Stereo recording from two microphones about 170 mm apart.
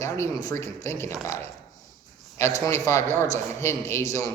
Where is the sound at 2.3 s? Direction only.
15° left (ahead or behind).